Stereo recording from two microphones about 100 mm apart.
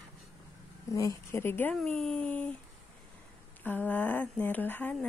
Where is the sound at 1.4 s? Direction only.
20° left (ahead or behind).